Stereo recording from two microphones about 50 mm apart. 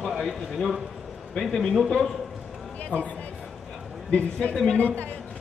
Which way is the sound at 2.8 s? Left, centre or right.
Left.